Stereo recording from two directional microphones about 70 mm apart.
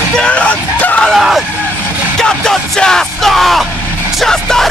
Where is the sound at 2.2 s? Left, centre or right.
Centre.